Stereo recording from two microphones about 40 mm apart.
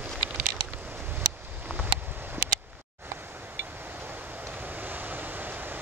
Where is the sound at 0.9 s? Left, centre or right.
Right.